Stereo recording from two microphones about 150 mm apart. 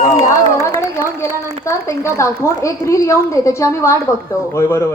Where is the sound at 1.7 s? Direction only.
20° left (ahead or behind).